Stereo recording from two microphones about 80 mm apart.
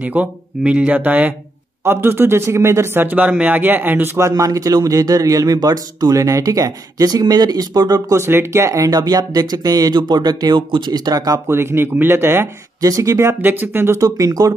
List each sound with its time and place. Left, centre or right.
0.0 s speech: centre
4.3 s speech: right
8.2 s speech: right
11.4 s speech: right
12.8 s speech: right
14.0 s speech: right